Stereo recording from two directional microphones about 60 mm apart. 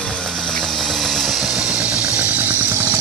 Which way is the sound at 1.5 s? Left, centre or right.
Centre.